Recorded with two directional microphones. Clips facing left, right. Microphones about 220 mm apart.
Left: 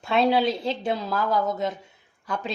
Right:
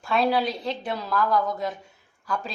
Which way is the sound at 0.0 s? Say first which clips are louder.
Left 2 dB; 25° left (ahead or behind).